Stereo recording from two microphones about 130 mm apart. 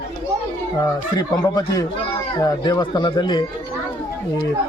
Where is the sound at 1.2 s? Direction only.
30° left (ahead or behind).